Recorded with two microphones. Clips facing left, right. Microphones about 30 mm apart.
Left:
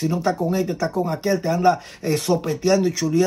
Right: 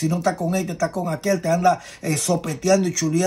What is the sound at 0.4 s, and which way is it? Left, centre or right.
Speech, left.